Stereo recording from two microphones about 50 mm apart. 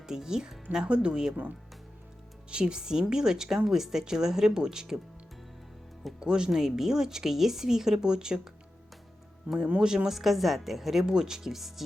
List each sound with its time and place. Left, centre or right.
0.0 s a woman's voice: centre
2.5 s a woman's voice: centre
6.1 s a woman's voice: centre
9.5 s speech: right
9.8 s speech: centre